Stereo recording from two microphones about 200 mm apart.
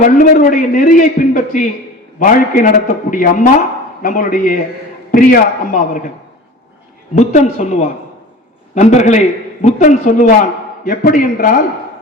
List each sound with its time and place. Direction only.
0.0 s a man's voice: 40° left (ahead or behind)
7.2 s a man's voice: 35° left (ahead or behind)